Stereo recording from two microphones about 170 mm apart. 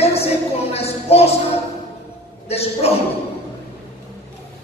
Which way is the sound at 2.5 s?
35° left (ahead or behind).